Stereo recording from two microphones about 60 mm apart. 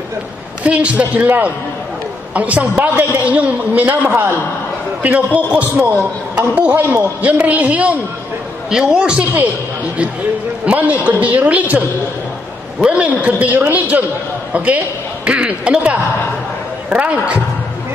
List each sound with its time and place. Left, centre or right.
0.7 s a man's voice: right
8.6 s a man's voice: centre
10.6 s a man's voice: right
12.8 s a man's voice: right